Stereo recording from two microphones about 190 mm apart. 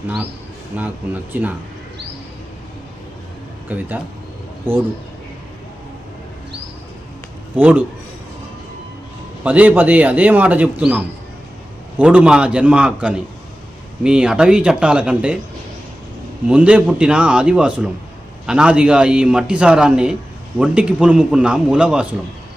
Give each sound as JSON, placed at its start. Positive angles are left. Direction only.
{"t": 0.7, "sound": "a man's voice", "side_deg": -10}
{"t": 3.7, "sound": "a man's voice", "side_deg": -10}
{"t": 7.5, "sound": "a man's voice", "side_deg": -10}
{"t": 9.4, "sound": "a man's voice", "side_deg": -10}
{"t": 16.5, "sound": "a man's voice", "side_deg": -5}